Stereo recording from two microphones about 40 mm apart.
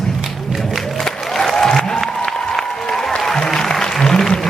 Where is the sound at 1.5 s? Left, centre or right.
Centre.